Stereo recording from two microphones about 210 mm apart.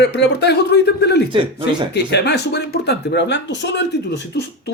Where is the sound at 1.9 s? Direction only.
55° left (ahead or behind).